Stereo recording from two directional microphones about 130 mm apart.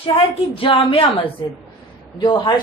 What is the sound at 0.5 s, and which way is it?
A woman's voice, 40° left (ahead or behind).